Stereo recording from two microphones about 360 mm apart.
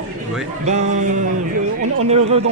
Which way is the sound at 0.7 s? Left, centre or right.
Centre.